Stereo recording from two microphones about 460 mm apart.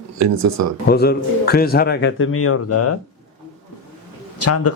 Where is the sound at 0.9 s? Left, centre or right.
Left.